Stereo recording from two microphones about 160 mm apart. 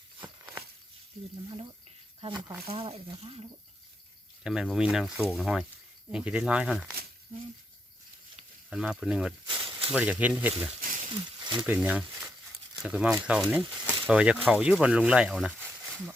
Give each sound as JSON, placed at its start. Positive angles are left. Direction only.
{"t": 2.2, "sound": "speech", "side_deg": -30}
{"t": 4.4, "sound": "speech", "side_deg": -5}
{"t": 8.7, "sound": "speech", "side_deg": -5}
{"t": 9.5, "sound": "snake", "side_deg": -35}
{"t": 9.9, "sound": "speech", "side_deg": -10}
{"t": 11.3, "sound": "a sound", "side_deg": -30}
{"t": 11.6, "sound": "speech", "side_deg": -10}